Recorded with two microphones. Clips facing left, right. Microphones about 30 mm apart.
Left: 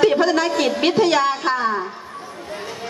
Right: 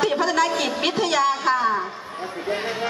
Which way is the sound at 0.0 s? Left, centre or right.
Centre.